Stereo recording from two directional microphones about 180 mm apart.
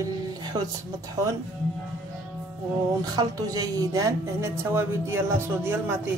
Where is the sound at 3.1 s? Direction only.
20° right (ahead or behind).